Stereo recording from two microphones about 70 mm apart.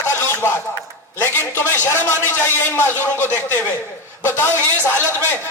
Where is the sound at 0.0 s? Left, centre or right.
Left.